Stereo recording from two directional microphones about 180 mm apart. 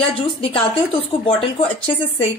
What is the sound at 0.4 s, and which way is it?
A woman's voice, 30° left (ahead or behind).